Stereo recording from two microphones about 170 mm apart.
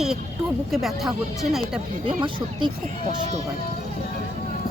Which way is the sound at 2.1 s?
30° right (ahead or behind).